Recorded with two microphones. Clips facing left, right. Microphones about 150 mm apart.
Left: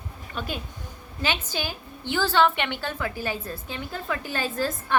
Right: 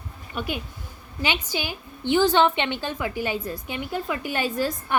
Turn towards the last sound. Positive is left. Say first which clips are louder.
# right 1 dB
turn(degrees=-15)  # may be behind; listen again after turning